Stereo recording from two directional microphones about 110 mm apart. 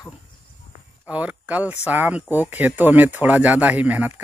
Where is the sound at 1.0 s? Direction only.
10° right (ahead or behind).